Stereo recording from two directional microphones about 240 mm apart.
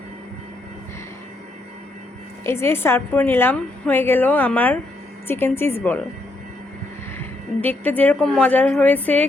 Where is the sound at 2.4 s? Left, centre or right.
Centre.